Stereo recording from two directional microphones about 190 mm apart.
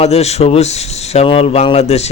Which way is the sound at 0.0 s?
35° left (ahead or behind).